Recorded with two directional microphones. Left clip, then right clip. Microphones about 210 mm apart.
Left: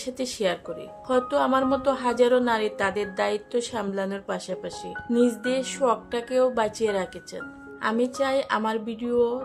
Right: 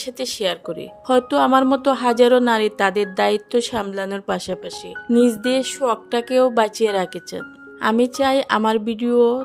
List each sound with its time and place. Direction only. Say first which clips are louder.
0.0 s speech: right 4 dB; 45° right (ahead or behind)